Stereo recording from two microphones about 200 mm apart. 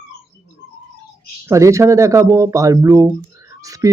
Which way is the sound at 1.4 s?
15° right (ahead or behind).